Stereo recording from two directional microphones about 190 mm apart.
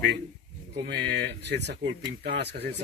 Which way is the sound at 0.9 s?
60° right (ahead or behind).